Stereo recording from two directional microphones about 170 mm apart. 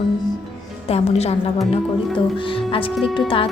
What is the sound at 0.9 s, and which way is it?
Speech, 35° left (ahead or behind).